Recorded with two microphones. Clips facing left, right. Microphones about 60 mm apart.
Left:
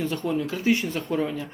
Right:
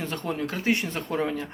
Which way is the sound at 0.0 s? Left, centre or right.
Right.